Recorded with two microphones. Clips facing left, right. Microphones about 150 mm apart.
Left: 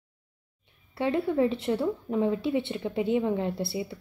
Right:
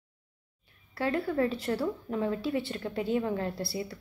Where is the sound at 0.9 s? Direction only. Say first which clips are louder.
Left 3 dB; 25° left (ahead or behind).